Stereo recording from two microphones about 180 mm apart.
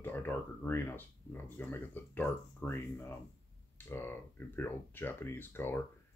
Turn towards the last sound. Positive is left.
turn(degrees=10)  # may be behind; listen again after turning